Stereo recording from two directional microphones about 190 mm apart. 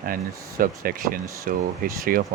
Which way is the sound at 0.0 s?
50° right (ahead or behind).